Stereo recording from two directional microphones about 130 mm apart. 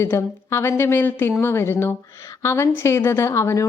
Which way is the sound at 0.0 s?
20° left (ahead or behind).